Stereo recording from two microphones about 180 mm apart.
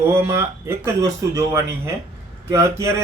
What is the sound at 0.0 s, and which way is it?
Speech, 15° right (ahead or behind).